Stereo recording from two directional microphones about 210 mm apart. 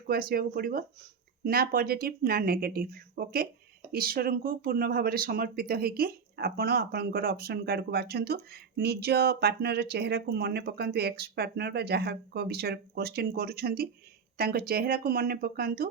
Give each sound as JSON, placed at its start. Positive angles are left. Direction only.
{"t": 0.1, "sound": "speech", "side_deg": -45}